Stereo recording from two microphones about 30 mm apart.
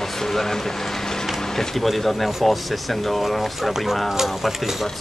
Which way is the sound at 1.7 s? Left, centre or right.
Centre.